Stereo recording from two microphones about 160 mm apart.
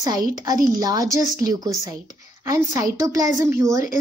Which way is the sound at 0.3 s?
25° right (ahead or behind).